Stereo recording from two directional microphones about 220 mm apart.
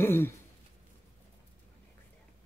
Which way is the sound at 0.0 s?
10° left (ahead or behind).